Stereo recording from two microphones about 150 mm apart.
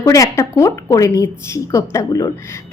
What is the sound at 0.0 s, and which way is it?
A woman's voice, 20° left (ahead or behind).